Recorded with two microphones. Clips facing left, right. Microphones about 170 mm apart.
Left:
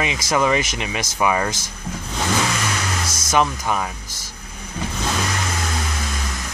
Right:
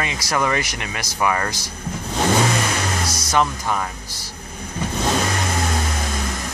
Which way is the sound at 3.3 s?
15° left (ahead or behind).